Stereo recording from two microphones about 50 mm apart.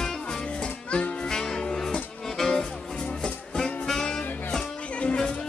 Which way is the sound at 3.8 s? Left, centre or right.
Centre.